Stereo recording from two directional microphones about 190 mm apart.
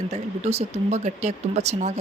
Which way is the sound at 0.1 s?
35° right (ahead or behind).